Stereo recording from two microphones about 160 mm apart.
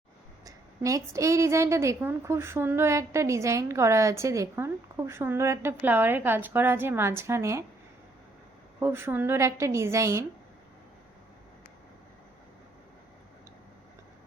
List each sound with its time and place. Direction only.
0.4 s a woman's voice: 20° right (ahead or behind)
8.8 s a woman's voice: 15° right (ahead or behind)